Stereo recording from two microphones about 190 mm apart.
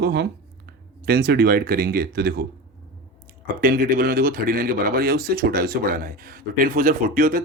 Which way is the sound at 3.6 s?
50° right (ahead or behind).